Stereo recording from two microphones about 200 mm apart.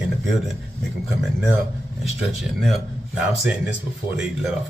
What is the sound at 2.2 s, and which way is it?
Speech, centre (ahead or behind).